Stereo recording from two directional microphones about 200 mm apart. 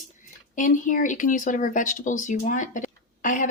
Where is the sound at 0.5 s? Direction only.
40° left (ahead or behind).